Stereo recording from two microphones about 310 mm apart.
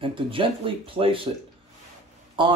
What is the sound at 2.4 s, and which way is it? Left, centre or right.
Speech, centre.